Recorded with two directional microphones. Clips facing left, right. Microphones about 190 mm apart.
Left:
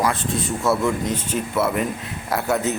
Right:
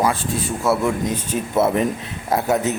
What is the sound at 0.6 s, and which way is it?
A man's voice, 10° right (ahead or behind).